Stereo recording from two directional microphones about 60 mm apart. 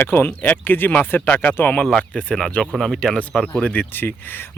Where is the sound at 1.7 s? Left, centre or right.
Centre.